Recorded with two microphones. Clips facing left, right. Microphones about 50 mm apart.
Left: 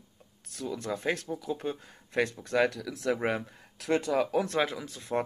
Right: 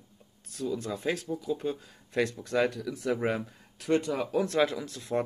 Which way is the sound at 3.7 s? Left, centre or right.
Left.